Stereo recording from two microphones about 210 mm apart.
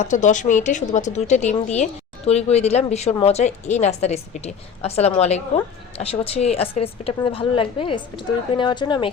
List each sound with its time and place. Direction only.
0.0 s a woman's voice: 35° left (ahead or behind)